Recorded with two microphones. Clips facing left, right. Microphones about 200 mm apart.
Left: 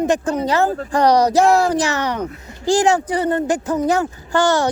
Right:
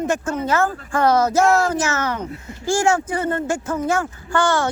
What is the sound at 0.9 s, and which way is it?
Speech, 20° left (ahead or behind).